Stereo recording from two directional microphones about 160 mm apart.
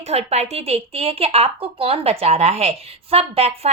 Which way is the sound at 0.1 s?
40° right (ahead or behind).